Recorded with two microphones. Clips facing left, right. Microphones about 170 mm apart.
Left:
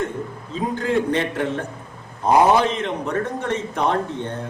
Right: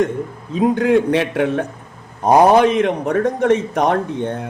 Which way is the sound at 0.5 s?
65° right (ahead or behind).